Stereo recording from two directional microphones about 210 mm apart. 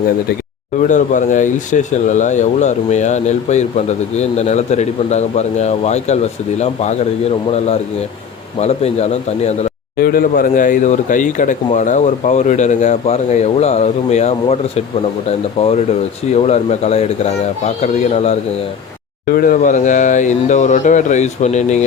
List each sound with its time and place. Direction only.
0.9 s speech: 35° left (ahead or behind)
10.0 s speech: 45° left (ahead or behind)
19.3 s speech: 40° left (ahead or behind)